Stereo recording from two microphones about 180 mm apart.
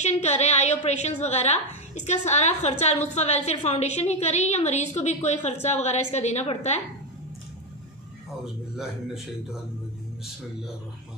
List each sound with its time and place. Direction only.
0.0 s a woman's voice: 40° left (ahead or behind)
8.7 s a man's voice: centre (ahead or behind)